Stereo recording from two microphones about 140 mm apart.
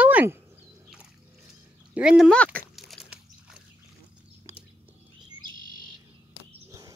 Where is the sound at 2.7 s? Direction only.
5° right (ahead or behind).